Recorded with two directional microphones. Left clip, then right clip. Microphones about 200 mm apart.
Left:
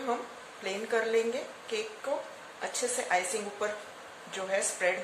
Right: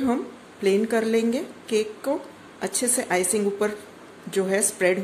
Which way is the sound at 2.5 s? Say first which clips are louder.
Right 6 dB; 50° right (ahead or behind).